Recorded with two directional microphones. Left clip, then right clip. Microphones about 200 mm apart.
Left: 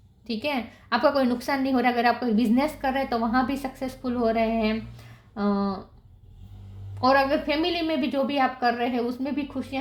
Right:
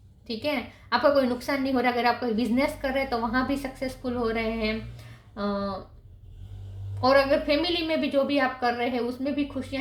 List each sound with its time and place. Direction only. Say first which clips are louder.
0.3 s a woman's voice: left 1 dB; 40° left (ahead or behind)
5.3 s a sound: left 2 dB; 40° left (ahead or behind)
7.0 s a woman's voice: even; 40° left (ahead or behind)